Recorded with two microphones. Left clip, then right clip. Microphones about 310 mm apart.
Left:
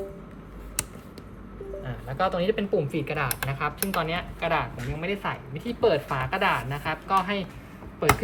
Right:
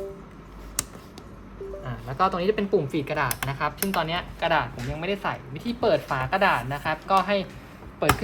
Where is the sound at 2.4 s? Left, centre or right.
Right.